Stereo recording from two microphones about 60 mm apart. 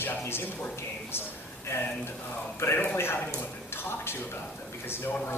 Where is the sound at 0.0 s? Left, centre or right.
Left.